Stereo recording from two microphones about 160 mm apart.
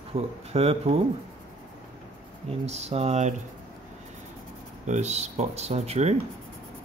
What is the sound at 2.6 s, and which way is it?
Speech, 40° right (ahead or behind).